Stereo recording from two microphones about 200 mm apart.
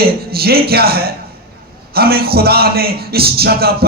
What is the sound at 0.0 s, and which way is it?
Speech, 50° right (ahead or behind).